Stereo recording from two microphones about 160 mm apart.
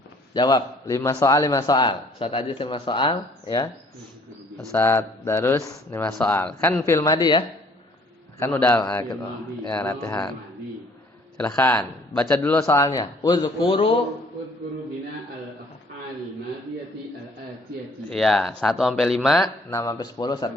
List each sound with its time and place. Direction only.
0.3 s a man's voice: 25° left (ahead or behind)
4.7 s a man's voice: 15° left (ahead or behind)
7.0 s a man's voice: 25° left (ahead or behind)
8.4 s a man's voice: 10° left (ahead or behind)
11.3 s a man's voice: 10° left (ahead or behind); by 14.0 s 35° left (ahead or behind)
18.1 s speech: centre (ahead or behind)
19.7 s a man's voice: 20° left (ahead or behind)